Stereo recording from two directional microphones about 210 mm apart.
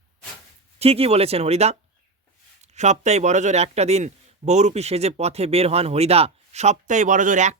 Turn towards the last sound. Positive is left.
turn(degrees=-35)  # may be behind; listen again after turning